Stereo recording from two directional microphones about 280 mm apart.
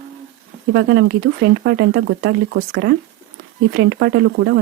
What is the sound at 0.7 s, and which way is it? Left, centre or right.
Speech, right.